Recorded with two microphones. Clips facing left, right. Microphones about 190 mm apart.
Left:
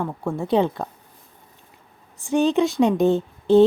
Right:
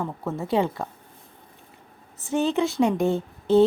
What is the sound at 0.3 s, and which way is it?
Speech, 15° left (ahead or behind).